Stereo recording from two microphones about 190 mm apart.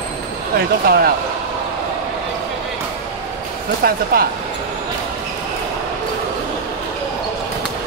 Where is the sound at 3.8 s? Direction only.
50° right (ahead or behind).